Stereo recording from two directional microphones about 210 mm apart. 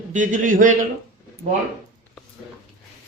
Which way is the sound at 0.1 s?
40° right (ahead or behind).